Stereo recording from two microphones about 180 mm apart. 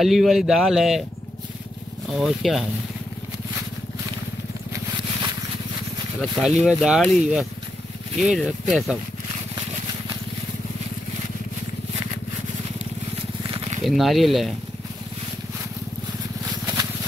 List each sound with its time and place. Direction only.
0.0 s speech: centre (ahead or behind)
2.0 s speech: centre (ahead or behind)
6.4 s speech: centre (ahead or behind)
13.4 s a sound: 30° right (ahead or behind)
13.8 s speech: centre (ahead or behind)